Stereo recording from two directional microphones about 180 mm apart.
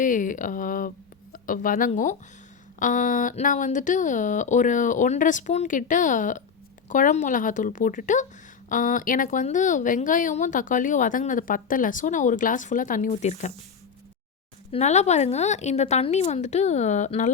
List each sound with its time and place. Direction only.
0.0 s speech: 45° left (ahead or behind)
14.7 s speech: 40° left (ahead or behind)